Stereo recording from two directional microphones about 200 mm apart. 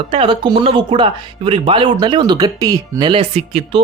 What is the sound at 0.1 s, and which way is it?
Speech, 25° right (ahead or behind).